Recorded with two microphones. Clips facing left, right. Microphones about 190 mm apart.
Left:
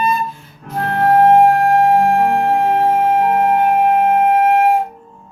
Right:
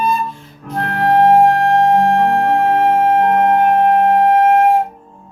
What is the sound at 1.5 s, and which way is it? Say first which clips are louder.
Flute: even; 5° left (ahead or behind).